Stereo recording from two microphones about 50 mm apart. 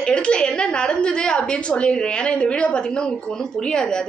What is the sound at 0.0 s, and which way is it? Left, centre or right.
A woman's voice, centre.